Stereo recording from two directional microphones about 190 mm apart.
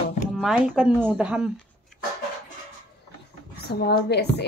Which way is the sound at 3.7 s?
55° left (ahead or behind).